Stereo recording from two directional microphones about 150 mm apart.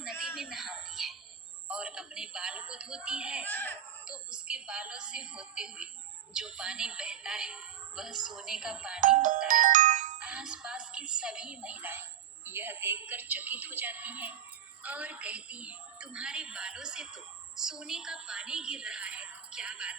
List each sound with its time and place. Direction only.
0.0 s a sound: 5° right (ahead or behind)
1.6 s speech: 5° right (ahead or behind)
3.4 s speech: 10° left (ahead or behind)
4.3 s a woman's voice: 5° right (ahead or behind)
9.0 s music: 60° right (ahead or behind)
10.2 s a woman's voice: 5° right (ahead or behind)